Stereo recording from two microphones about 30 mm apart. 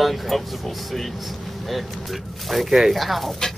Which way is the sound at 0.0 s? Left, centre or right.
Centre.